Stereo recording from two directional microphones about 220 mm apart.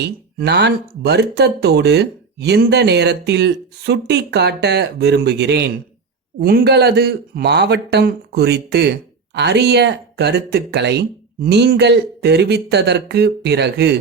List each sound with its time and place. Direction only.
0.0 s speech: 50° right (ahead or behind)